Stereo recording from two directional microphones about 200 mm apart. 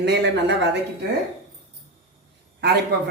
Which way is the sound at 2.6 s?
55° right (ahead or behind).